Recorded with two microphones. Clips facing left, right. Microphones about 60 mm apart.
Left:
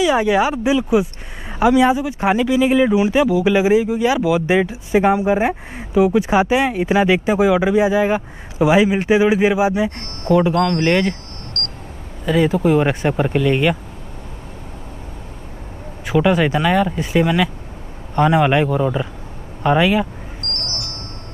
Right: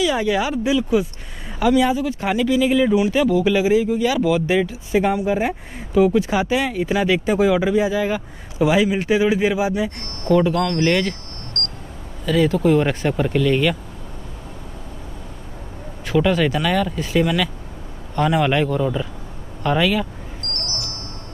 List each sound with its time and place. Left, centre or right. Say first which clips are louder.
0.0 s speech: left 4 dB; left
3.5 s speech: left 2 dB; left
12.3 s speech: left 1 dB; centre
16.1 s speech: left 2 dB; centre
20.6 s a sound: left 1 dB; left